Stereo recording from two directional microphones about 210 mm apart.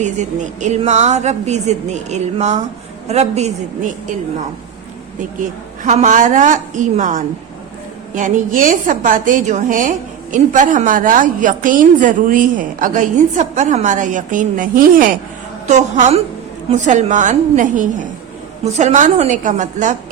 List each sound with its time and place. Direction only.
0.0 s a woman's voice: 35° right (ahead or behind)
5.4 s a woman's voice: 35° right (ahead or behind)